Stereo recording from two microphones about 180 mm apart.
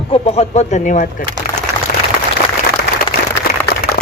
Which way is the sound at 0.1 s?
35° left (ahead or behind).